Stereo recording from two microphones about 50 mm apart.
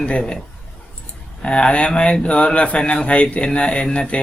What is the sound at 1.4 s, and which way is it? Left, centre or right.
Speech, left.